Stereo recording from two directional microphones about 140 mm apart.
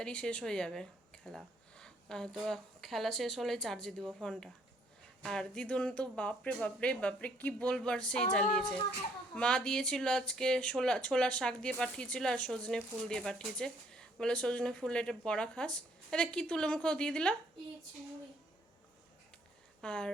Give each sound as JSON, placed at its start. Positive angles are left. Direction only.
{"t": 0.0, "sound": "speech", "side_deg": 5}
{"t": 19.8, "sound": "speech", "side_deg": 5}